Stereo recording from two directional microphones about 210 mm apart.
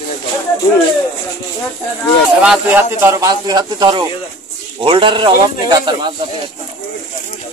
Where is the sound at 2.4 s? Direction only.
5° right (ahead or behind).